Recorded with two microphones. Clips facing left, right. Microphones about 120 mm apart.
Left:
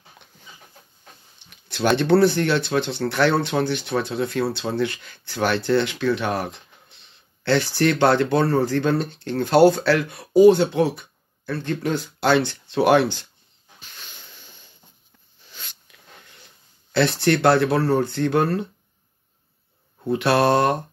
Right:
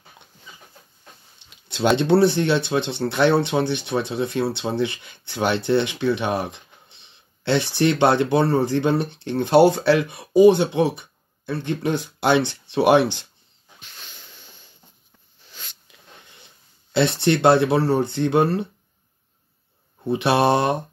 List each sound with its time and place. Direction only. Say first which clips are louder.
1.5 s a sound: right 1 dB; 20° right (ahead or behind)
2.0 s speech: left 1 dB; 25° right (ahead or behind)
5.7 s a sound: even; 20° right (ahead or behind)
7.7 s speech: right 1 dB; 20° right (ahead or behind)
16.9 s speech: even; 20° right (ahead or behind)
20.1 s speech: even; 20° right (ahead or behind)